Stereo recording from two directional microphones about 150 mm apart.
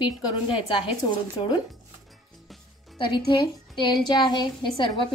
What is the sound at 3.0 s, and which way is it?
A woman's voice, 30° left (ahead or behind).